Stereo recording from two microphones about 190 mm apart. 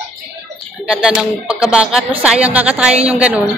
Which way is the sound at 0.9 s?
5° right (ahead or behind).